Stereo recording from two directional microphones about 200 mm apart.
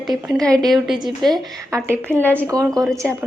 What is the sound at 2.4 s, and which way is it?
Speech, 15° right (ahead or behind).